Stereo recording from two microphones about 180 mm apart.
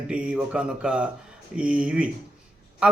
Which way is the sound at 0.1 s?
5° right (ahead or behind).